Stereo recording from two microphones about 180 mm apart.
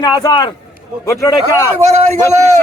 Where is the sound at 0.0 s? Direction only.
20° left (ahead or behind).